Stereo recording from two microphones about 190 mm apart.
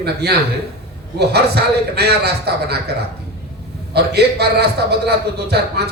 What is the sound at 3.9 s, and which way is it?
A man's voice, 60° right (ahead or behind).